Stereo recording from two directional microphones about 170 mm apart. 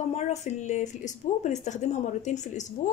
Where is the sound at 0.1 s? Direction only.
40° left (ahead or behind).